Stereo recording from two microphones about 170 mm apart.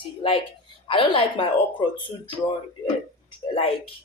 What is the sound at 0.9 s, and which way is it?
Speech, 30° left (ahead or behind).